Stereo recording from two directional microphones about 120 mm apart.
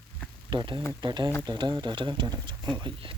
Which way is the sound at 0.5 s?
40° right (ahead or behind).